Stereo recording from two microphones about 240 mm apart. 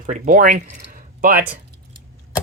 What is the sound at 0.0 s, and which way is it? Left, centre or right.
Speech, right.